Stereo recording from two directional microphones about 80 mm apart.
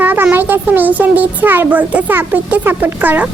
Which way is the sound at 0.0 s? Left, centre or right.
Right.